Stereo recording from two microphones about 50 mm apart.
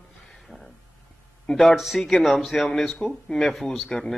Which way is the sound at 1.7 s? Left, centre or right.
Centre.